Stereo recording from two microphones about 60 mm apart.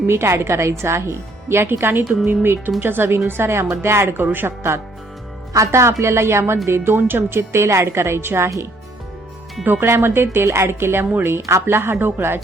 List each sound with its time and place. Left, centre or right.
0.1 s a woman's voice: right
4.3 s speech: right
5.5 s a woman's voice: right
9.8 s a woman's voice: right